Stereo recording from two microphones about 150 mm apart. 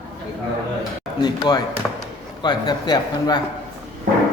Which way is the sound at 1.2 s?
30° left (ahead or behind).